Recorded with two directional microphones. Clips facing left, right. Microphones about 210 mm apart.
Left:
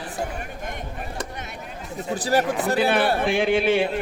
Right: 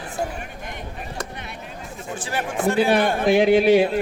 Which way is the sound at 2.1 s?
40° left (ahead or behind).